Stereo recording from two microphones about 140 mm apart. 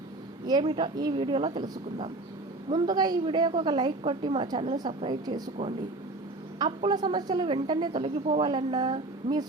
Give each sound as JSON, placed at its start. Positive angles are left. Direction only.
{"t": 0.4, "sound": "a woman's voice", "side_deg": -35}
{"t": 6.6, "sound": "a woman's voice", "side_deg": -30}